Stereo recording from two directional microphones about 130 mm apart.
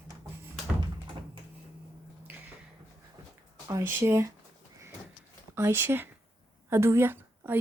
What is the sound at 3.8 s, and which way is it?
Speech, 20° right (ahead or behind).